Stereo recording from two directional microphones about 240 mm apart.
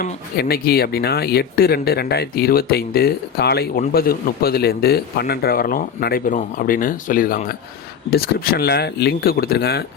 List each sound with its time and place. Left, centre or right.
0.0 s speech: left